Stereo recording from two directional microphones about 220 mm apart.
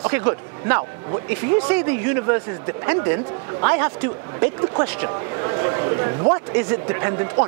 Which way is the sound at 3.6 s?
25° right (ahead or behind).